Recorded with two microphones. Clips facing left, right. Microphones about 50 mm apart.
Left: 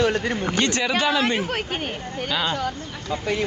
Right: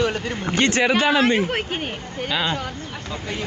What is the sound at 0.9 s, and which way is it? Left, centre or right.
Speech, right.